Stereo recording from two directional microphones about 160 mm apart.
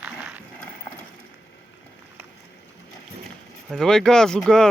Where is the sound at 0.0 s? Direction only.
10° right (ahead or behind).